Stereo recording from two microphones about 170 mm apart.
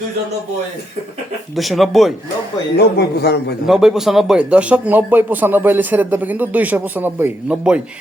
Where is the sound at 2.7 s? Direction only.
75° left (ahead or behind).